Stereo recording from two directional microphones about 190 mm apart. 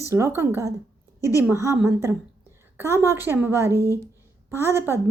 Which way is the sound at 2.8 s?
15° right (ahead or behind).